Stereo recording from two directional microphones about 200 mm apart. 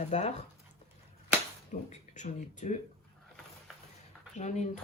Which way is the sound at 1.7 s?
35° left (ahead or behind).